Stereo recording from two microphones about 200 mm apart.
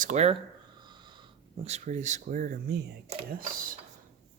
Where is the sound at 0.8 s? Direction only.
20° right (ahead or behind); by 3.7 s 35° right (ahead or behind).